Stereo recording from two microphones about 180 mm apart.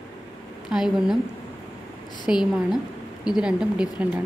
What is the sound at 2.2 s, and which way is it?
A woman's voice, 5° right (ahead or behind).